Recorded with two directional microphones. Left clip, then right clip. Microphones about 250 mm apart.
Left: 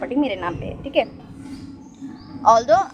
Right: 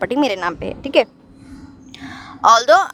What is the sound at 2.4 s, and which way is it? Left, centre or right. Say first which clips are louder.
Speech: right 3 dB; right.